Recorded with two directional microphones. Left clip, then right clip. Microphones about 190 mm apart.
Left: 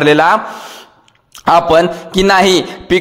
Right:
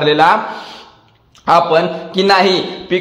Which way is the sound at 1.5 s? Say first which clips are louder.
Left 2 dB; 45° left (ahead or behind).